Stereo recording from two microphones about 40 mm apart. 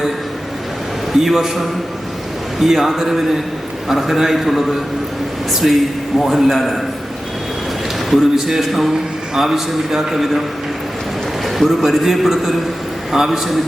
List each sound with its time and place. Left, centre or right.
1.2 s a man's voice: centre
8.1 s a man's voice: centre
11.4 s a man's voice: centre